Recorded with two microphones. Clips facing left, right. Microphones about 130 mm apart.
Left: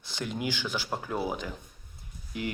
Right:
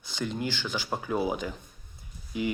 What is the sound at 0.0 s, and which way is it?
Speech, 5° left (ahead or behind).